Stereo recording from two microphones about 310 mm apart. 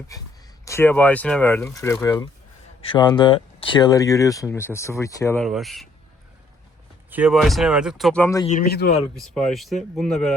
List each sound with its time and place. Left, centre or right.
0.6 s speech: centre
7.1 s speech: centre
8.4 s a man's voice: left
9.1 s speech: centre